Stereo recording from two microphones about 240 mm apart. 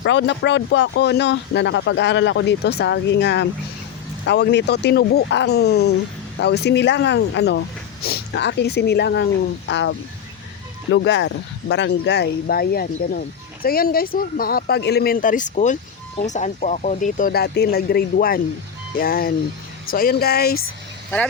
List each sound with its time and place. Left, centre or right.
0.0 s speech: left
10.9 s speech: left